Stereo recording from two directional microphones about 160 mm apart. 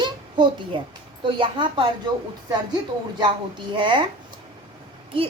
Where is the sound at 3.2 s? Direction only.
30° right (ahead or behind).